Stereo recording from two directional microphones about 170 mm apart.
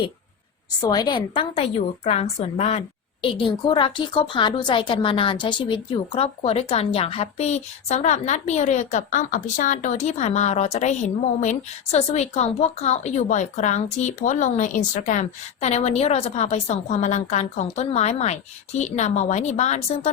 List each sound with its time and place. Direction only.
0.8 s a woman's voice: 25° left (ahead or behind); by 20.1 s 40° left (ahead or behind)